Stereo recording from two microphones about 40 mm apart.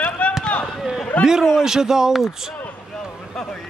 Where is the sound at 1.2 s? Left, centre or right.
Centre.